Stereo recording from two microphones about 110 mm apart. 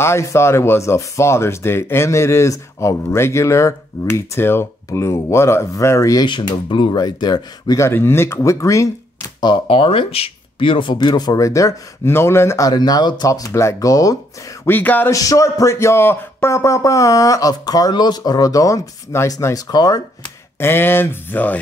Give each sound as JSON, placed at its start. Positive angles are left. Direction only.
{"t": 0.0, "sound": "speech", "side_deg": 25}
{"t": 6.2, "sound": "speech", "side_deg": 45}
{"t": 7.8, "sound": "speech", "side_deg": 20}
{"t": 9.7, "sound": "speech", "side_deg": 60}
{"t": 12.7, "sound": "speech", "side_deg": 40}
{"t": 14.6, "sound": "speech", "side_deg": 15}
{"t": 15.0, "sound": "speech", "side_deg": 30}
{"t": 20.5, "sound": "speech", "side_deg": 20}